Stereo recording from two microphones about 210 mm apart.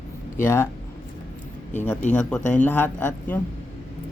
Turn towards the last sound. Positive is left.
turn(degrees=10)  # may be behind; listen again after turning